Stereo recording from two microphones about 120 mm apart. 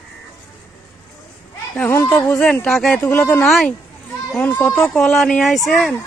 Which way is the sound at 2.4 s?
10° left (ahead or behind).